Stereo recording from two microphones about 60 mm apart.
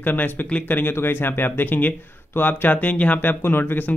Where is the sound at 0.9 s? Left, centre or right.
Left.